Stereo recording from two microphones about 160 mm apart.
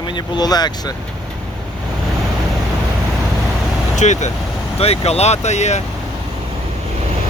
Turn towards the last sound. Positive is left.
turn(degrees=45)  # may be behind; listen again after turning